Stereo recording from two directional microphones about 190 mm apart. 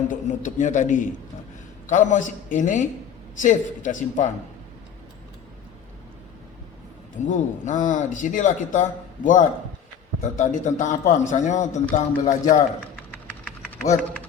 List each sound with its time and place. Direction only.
0.1 s a man's voice: 40° left (ahead or behind)
7.2 s a man's voice: 40° left (ahead or behind)